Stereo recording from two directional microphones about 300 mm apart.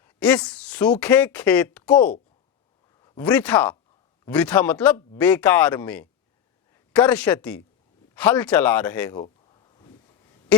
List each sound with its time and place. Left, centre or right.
0.0 s speech: centre
3.0 s speech: centre
9.2 s a sound: centre